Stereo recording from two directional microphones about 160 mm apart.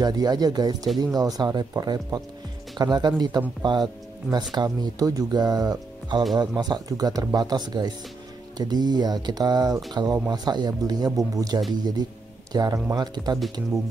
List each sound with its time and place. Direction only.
0.0 s speech: 25° right (ahead or behind)